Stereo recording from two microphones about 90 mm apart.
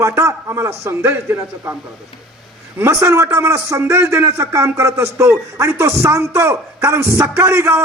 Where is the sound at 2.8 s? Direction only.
30° right (ahead or behind).